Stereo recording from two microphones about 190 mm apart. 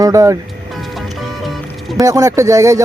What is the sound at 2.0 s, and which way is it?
Speech, 15° right (ahead or behind).